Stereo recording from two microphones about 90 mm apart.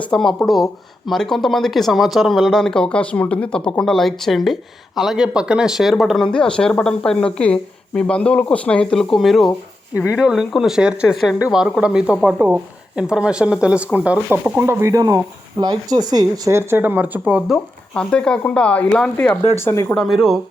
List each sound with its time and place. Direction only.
0.0 s speech: 5° left (ahead or behind); by 14.6 s 15° right (ahead or behind)
14.6 s speech: 30° right (ahead or behind)
15.5 s speech: 55° right (ahead or behind)
16.5 s speech: 25° right (ahead or behind)
17.9 s speech: 10° left (ahead or behind)
19.1 s speech: 20° left (ahead or behind)
20.0 s speech: centre (ahead or behind)